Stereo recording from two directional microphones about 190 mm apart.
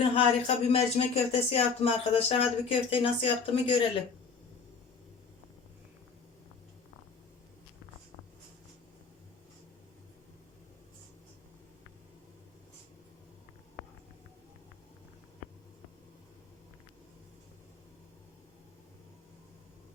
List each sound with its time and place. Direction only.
0.2 s speech: 30° left (ahead or behind)